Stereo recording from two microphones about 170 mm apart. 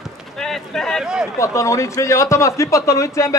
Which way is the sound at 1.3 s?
15° left (ahead or behind).